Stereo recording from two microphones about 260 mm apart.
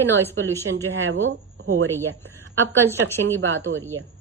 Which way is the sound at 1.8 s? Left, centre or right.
Centre.